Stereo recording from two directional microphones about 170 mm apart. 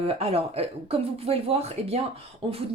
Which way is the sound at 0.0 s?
35° right (ahead or behind).